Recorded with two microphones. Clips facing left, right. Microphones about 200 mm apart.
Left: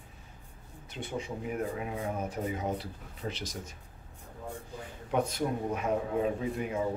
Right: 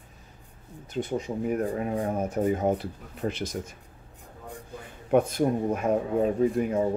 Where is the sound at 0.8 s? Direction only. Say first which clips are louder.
Right 7 dB; 40° right (ahead or behind).